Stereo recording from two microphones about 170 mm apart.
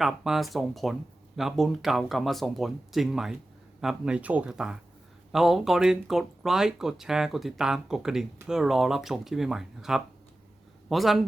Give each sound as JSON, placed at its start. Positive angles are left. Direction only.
{"t": 0.0, "sound": "speech", "side_deg": 0}